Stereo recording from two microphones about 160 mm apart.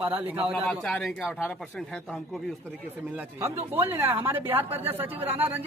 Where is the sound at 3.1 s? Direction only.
15° right (ahead or behind).